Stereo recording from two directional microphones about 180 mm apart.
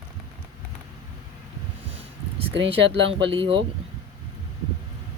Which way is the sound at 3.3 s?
30° right (ahead or behind).